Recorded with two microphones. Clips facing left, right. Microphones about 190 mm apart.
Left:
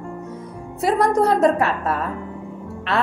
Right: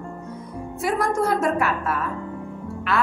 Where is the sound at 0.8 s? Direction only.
35° left (ahead or behind).